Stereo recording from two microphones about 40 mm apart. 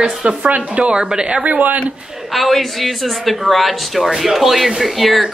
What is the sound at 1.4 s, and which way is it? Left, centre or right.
Speech, right.